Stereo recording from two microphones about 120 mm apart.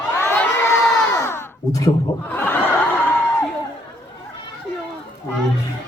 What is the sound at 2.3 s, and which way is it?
Snicker, 15° left (ahead or behind).